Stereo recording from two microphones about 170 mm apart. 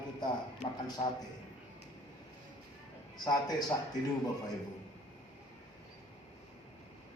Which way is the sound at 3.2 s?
25° left (ahead or behind).